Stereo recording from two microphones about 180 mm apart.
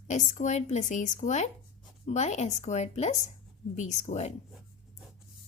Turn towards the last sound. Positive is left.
turn(degrees=40)  # may be behind; listen again after turning